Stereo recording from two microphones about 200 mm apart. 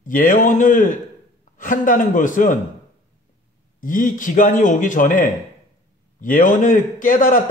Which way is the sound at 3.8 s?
40° left (ahead or behind).